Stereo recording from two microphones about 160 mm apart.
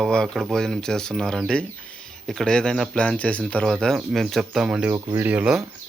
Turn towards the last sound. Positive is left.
turn(degrees=-5)  # may be behind; listen again after turning